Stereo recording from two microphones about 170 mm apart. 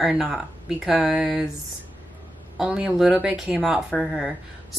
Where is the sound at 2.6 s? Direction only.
5° right (ahead or behind).